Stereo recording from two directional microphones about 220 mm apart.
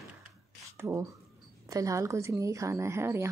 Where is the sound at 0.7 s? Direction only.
10° right (ahead or behind).